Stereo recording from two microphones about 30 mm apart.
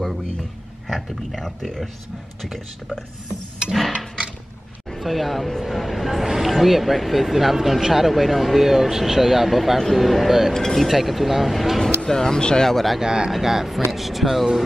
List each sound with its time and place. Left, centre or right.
0.0 s speech: centre
4.9 s speech: centre
10.5 s speech: centre
10.9 s speech: centre
12.0 s speech: centre
12.4 s speech: left
12.6 s speech: centre
13.0 s speech: right
13.3 s speech: centre